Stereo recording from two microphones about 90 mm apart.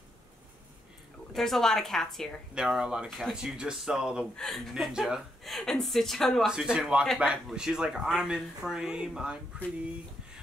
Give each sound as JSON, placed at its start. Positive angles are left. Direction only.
{"t": 1.3, "sound": "a woman's voice", "side_deg": 5}
{"t": 2.5, "sound": "a woman's voice", "side_deg": -10}
{"t": 6.5, "sound": "speech", "side_deg": -10}